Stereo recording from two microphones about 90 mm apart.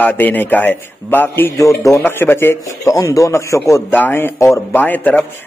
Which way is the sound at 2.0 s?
25° left (ahead or behind).